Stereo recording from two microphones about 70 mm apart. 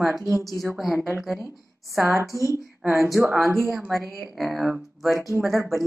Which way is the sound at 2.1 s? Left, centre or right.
Right.